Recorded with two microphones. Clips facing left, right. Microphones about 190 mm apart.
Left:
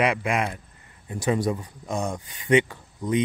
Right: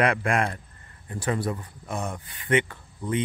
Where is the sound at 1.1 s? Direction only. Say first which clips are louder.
Left 4 dB; 15° left (ahead or behind).